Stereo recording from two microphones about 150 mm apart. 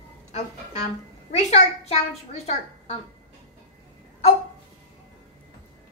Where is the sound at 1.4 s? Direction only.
50° left (ahead or behind).